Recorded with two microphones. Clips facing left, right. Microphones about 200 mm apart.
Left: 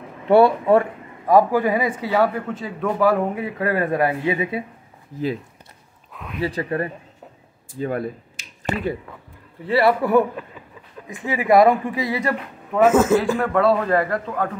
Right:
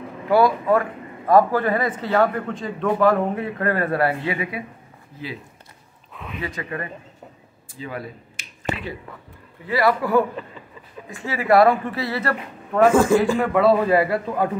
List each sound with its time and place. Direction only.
0.3 s speech: 30° left (ahead or behind)
1.2 s a man's voice: 10° left (ahead or behind)
6.1 s a sound: centre (ahead or behind)
6.4 s speech: 35° left (ahead or behind)
7.8 s speech: 50° left (ahead or behind)
9.7 s a man's voice: 30° left (ahead or behind); by 14.5 s 10° right (ahead or behind)